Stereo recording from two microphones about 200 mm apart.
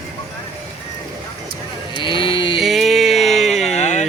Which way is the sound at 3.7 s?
35° left (ahead or behind).